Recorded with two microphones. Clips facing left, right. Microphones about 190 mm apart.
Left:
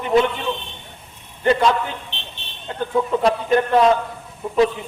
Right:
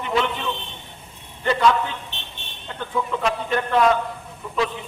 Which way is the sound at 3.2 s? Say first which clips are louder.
Left 6 dB; 35° left (ahead or behind).